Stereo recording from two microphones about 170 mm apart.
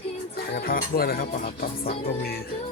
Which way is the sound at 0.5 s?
60° left (ahead or behind).